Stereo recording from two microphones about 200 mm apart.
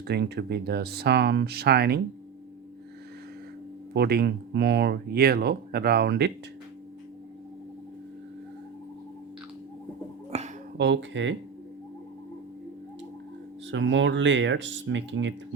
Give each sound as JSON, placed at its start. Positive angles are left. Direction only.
{"t": 0.1, "sound": "speech", "side_deg": -55}
{"t": 3.9, "sound": "speech", "side_deg": -55}
{"t": 10.3, "sound": "a sound", "side_deg": -30}
{"t": 10.8, "sound": "speech", "side_deg": -65}
{"t": 13.7, "sound": "speech", "side_deg": -65}